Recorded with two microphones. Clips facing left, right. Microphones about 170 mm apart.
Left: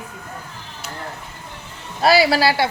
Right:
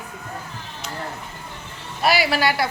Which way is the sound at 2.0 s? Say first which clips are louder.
Left 5 dB; 35° left (ahead or behind).